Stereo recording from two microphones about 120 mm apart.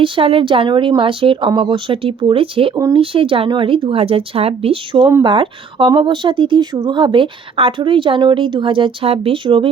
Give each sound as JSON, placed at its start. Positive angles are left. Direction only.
{"t": 0.0, "sound": "speech", "side_deg": -50}